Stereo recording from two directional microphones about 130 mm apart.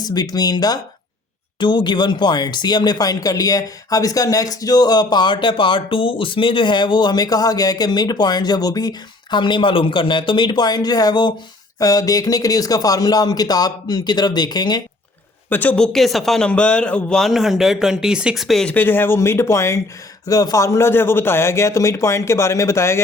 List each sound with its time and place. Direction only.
0.0 s speech: 30° left (ahead or behind)
15.4 s speech: 15° left (ahead or behind)
18.7 s speech: 15° left (ahead or behind)